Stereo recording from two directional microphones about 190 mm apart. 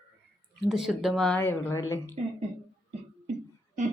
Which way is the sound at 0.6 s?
Centre (ahead or behind).